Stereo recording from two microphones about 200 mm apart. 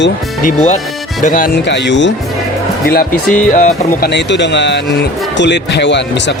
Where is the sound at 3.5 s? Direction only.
40° left (ahead or behind).